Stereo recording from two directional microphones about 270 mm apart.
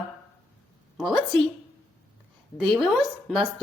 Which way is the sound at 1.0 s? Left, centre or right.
Centre.